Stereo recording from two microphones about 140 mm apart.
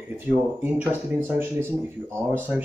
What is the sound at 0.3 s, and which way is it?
Speech, 10° right (ahead or behind).